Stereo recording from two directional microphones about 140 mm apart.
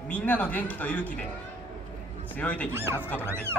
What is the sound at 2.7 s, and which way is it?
Speech, 15° right (ahead or behind).